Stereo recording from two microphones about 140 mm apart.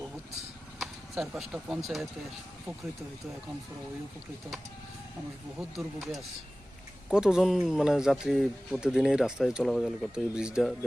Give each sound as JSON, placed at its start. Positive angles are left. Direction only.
{"t": 0.8, "sound": "speech", "side_deg": 0}
{"t": 5.5, "sound": "speech", "side_deg": 0}